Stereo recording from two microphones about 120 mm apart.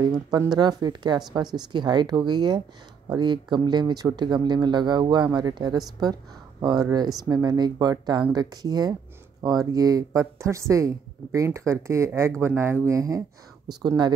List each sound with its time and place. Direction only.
0.0 s speech: 35° right (ahead or behind)
13.8 s speech: 40° right (ahead or behind)